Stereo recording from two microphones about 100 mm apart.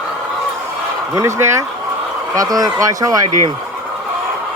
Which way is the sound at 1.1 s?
30° right (ahead or behind).